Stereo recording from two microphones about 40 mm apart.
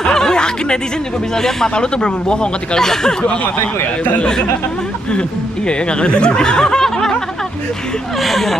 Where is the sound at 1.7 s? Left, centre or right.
Left.